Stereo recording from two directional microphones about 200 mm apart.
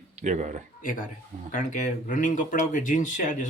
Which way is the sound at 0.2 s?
35° right (ahead or behind).